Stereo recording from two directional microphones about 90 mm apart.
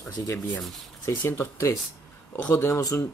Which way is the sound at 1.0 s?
30° left (ahead or behind).